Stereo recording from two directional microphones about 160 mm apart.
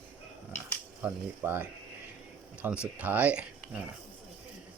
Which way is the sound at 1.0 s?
10° right (ahead or behind).